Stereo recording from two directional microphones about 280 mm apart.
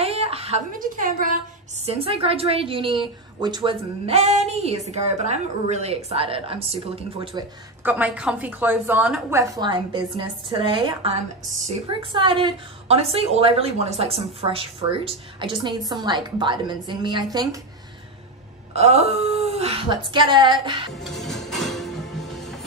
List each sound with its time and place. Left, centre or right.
0.0 s a woman's voice: right
7.8 s a woman's voice: centre
18.8 s a woman's voice: right
20.9 s music: centre